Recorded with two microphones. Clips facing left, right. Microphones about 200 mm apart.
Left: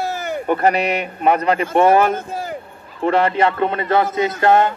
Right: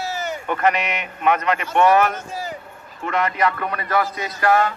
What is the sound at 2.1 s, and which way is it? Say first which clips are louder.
Speech: left 4 dB; 55° left (ahead or behind).